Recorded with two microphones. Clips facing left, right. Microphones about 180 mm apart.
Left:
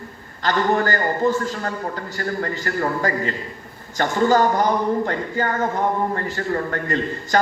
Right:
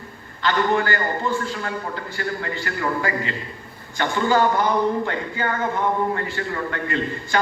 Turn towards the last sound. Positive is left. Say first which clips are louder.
# left 2 dB
turn(degrees=40)  # may be behind; listen again after turning